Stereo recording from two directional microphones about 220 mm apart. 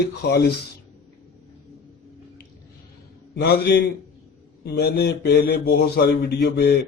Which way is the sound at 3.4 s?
45° left (ahead or behind).